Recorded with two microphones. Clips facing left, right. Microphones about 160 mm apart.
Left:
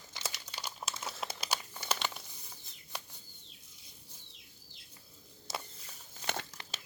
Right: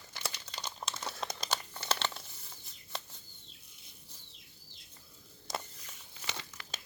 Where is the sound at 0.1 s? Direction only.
15° left (ahead or behind).